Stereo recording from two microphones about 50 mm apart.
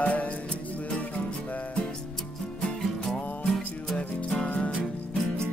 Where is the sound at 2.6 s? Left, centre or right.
Centre.